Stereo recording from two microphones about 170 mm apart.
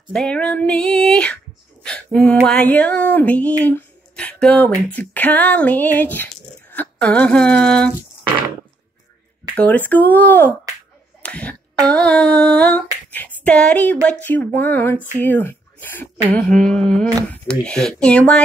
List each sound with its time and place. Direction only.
0.1 s speech: 5° left (ahead or behind)
9.6 s a child's voice: 10° left (ahead or behind)
13.1 s a sound: 10° left (ahead or behind)
14.2 s speech: 10° left (ahead or behind)